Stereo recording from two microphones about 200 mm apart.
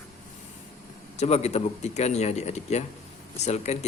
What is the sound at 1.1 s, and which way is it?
Speech, 30° left (ahead or behind).